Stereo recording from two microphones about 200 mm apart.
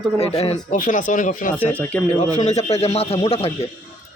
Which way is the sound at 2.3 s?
35° left (ahead or behind).